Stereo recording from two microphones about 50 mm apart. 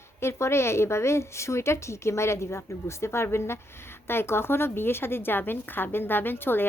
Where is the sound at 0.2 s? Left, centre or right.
Left.